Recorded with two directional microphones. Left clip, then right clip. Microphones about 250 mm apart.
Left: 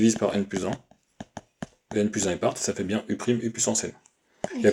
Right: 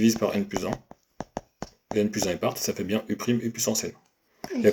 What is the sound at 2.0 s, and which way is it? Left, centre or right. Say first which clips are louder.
Speech: even; left.